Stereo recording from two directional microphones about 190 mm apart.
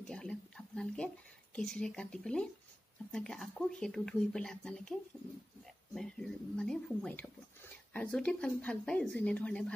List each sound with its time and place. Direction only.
0.0 s speech: 5° left (ahead or behind)
5.9 s speech: 5° left (ahead or behind)